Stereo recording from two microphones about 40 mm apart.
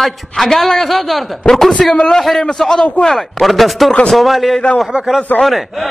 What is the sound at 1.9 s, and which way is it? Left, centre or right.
Speech, centre.